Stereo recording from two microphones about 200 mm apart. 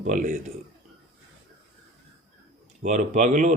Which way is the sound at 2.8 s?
40° right (ahead or behind).